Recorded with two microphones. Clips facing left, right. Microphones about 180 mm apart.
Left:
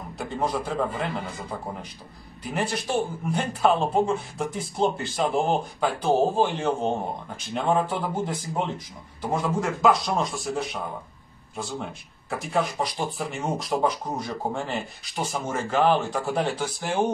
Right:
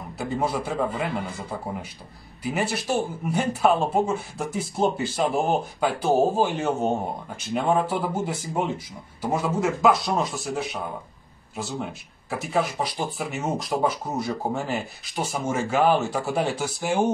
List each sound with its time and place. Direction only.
0.2 s a man's voice: 5° right (ahead or behind)